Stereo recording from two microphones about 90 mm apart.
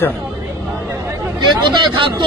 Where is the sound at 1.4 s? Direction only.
60° right (ahead or behind).